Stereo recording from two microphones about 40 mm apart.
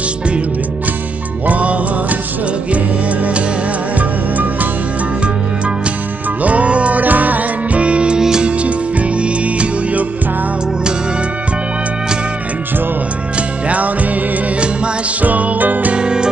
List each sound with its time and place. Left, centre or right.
1.5 s music: right
6.4 s music: right
7.8 s music: right
8.2 s music: centre
8.5 s music: right
13.7 s music: right
15.2 s music: right
15.9 s music: right